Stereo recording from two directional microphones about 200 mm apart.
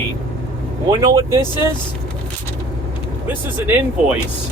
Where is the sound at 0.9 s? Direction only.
15° right (ahead or behind).